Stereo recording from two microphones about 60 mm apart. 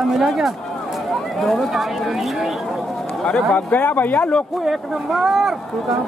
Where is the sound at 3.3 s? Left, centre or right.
Left.